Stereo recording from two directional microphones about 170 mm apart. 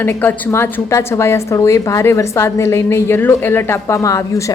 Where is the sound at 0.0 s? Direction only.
10° left (ahead or behind).